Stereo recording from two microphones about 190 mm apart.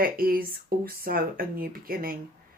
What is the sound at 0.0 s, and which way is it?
Speech, 50° right (ahead or behind).